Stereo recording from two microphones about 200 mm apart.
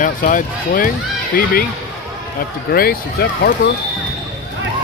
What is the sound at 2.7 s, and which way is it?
Speech, 50° left (ahead or behind).